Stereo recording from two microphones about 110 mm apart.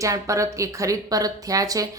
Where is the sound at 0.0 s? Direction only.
30° right (ahead or behind).